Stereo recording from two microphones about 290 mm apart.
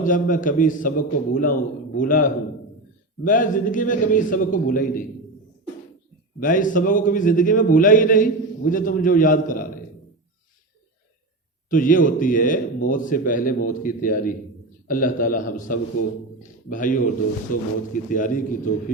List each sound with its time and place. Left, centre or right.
0.0 s a man's voice: left
6.4 s a man's voice: left
11.7 s a man's voice: left